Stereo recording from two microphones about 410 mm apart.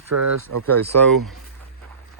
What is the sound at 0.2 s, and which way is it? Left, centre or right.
Speech, right.